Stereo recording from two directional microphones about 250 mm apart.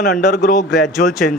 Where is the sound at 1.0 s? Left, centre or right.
Left.